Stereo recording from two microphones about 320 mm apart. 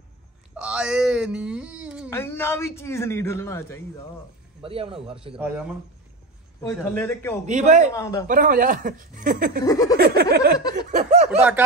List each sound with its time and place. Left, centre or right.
0.6 s a sound: centre
2.0 s a man's voice: centre
4.6 s speech: centre
6.6 s a man's voice: centre
7.4 s speech: right
7.9 s a man's voice: centre
8.3 s speech: right
9.7 s a man's voice: centre
9.9 s speech: right
10.9 s snicker: right
11.2 s speech: centre